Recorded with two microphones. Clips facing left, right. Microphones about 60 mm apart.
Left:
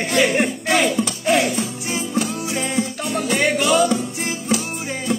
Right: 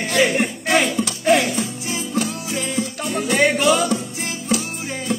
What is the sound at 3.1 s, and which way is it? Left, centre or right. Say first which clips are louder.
Music: right 3 dB; centre.